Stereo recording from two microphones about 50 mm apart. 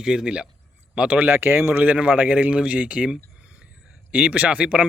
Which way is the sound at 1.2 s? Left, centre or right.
Right.